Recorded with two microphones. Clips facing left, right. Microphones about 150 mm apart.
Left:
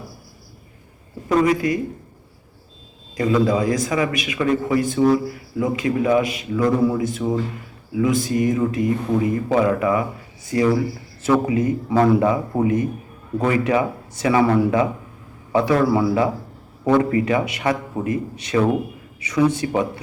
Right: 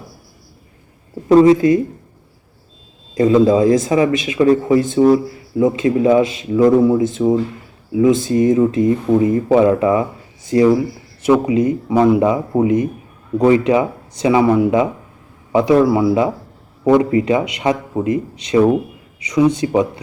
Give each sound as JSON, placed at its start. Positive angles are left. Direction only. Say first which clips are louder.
{"t": 1.3, "sound": "speech", "louder": "right 9 dB", "side_deg": -30}
{"t": 3.2, "sound": "speech", "louder": "right 7 dB", "side_deg": -25}